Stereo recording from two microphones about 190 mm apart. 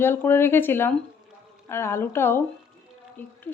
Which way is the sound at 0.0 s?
10° left (ahead or behind).